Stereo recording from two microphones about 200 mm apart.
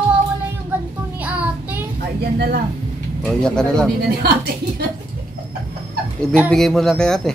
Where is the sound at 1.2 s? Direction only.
5° right (ahead or behind).